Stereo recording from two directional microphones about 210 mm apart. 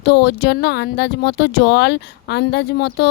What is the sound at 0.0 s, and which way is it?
Speech, 50° left (ahead or behind).